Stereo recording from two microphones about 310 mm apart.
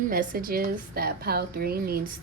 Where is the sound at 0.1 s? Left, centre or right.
Right.